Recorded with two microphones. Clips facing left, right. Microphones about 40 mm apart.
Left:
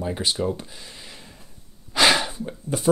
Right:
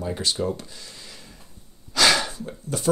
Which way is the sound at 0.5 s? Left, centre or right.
Left.